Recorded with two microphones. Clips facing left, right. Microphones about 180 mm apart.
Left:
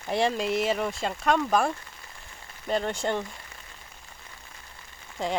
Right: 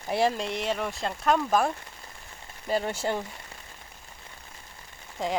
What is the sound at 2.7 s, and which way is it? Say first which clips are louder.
Speech: even; 5° right (ahead or behind).